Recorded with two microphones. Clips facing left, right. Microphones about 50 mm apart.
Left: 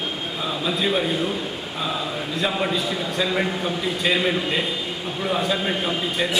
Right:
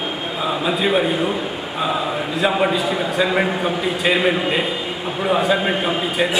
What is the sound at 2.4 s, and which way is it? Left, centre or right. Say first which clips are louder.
A man's voice: right 6 dB; centre.